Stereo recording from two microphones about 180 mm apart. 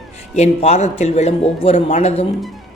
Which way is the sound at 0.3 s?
35° left (ahead or behind).